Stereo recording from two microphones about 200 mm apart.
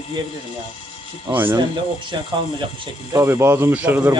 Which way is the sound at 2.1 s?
20° right (ahead or behind).